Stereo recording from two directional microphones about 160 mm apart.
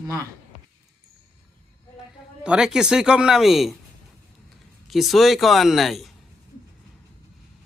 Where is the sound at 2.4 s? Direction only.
5° right (ahead or behind).